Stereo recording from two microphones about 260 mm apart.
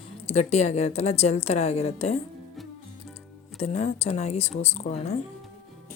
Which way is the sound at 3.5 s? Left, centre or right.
Left.